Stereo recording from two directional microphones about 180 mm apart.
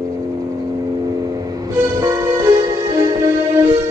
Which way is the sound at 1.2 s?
20° right (ahead or behind).